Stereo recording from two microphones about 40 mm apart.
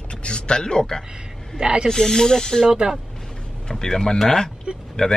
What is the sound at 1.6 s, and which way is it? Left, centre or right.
Speech, right.